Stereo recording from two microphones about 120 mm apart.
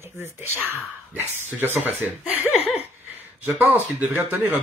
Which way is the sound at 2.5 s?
60° left (ahead or behind).